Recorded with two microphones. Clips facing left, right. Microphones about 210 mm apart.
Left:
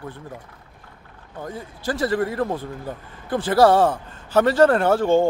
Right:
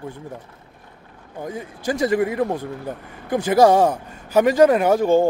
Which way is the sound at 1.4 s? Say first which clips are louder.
Right 3 dB; 15° right (ahead or behind).